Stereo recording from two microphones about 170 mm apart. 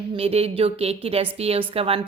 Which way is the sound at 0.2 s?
35° right (ahead or behind).